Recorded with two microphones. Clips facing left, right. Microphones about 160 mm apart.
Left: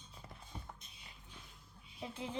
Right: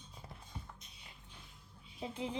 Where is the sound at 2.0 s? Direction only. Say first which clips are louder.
Right 4 dB; 20° right (ahead or behind).